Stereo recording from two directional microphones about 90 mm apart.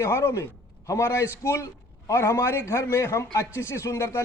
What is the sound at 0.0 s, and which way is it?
A man's voice, 30° left (ahead or behind).